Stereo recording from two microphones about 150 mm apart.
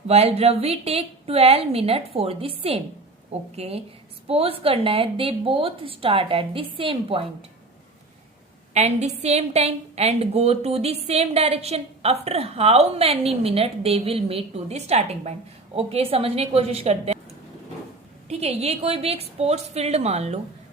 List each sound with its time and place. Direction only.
0.1 s a woman's voice: 45° right (ahead or behind)
8.7 s a woman's voice: 50° right (ahead or behind)
18.3 s a woman's voice: 45° right (ahead or behind)